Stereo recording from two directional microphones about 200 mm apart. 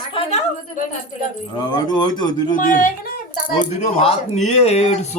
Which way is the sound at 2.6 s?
40° left (ahead or behind).